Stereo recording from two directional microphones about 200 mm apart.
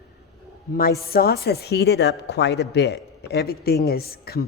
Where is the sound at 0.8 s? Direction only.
50° left (ahead or behind).